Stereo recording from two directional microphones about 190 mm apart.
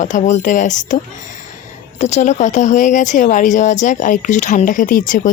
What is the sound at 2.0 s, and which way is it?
Speech, 35° left (ahead or behind).